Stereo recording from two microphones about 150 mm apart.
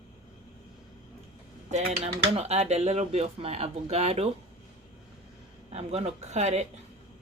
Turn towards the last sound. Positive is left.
turn(degrees=-50)  # may be behind; listen again after turning